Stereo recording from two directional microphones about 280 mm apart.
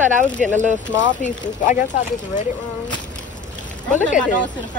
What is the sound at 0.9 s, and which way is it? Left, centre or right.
Speech, left.